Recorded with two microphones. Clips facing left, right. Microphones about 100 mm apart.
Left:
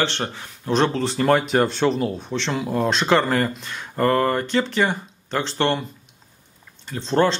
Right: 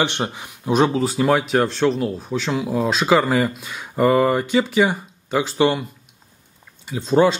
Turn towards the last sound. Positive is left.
turn(degrees=-10)  # may be behind; listen again after turning